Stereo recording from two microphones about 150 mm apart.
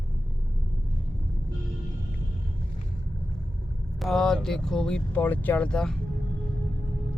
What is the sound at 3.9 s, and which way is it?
Speech, centre (ahead or behind).